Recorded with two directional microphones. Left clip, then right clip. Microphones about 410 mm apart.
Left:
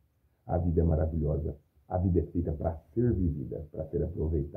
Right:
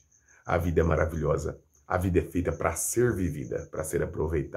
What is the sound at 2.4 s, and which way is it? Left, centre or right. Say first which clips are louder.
Speech: right 6 dB; right.